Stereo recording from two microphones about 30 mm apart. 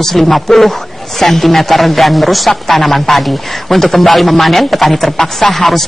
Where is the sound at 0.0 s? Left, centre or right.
Centre.